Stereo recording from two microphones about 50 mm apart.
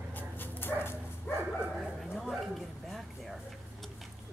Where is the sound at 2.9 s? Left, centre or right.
Centre.